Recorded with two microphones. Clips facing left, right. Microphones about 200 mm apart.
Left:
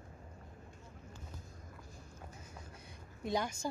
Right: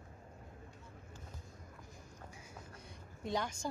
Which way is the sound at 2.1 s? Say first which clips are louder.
Left 2 dB; 10° right (ahead or behind).